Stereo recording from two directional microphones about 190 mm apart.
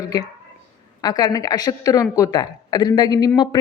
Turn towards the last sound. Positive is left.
turn(degrees=20)  # may be behind; listen again after turning